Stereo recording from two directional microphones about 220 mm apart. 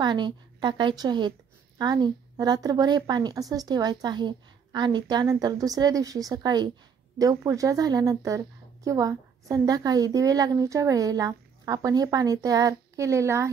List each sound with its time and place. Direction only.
0.0 s a woman's voice: 20° right (ahead or behind)